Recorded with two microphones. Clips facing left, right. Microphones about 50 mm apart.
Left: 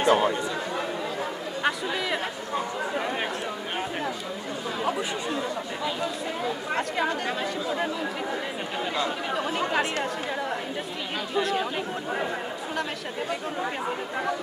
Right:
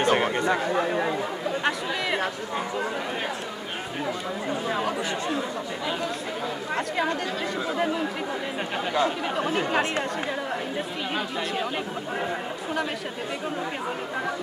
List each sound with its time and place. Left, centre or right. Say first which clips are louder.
0.0 s speech: even; right
1.6 s speech: left 3 dB; centre
6.7 s speech: right 1 dB; centre
9.3 s speech: right 1 dB; centre